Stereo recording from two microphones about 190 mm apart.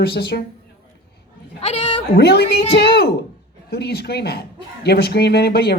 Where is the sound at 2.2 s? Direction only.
60° left (ahead or behind).